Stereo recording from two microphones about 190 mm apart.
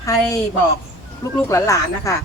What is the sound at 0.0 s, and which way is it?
A woman's voice, 15° left (ahead or behind).